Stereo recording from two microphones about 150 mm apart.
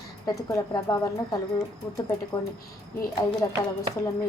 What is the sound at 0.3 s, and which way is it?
Speech, 25° left (ahead or behind).